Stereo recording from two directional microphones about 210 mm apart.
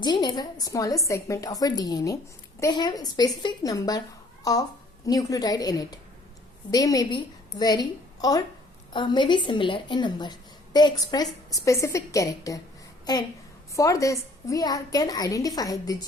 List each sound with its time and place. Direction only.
0.0 s a woman's voice: 20° left (ahead or behind)
13.7 s a woman's voice: 15° left (ahead or behind)